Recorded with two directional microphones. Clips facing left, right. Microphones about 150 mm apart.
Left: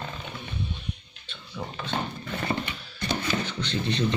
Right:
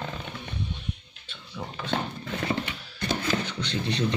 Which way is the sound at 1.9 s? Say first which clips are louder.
Right 1 dB; 90° right.